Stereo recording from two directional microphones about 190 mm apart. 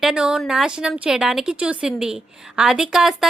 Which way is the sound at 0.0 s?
5° right (ahead or behind).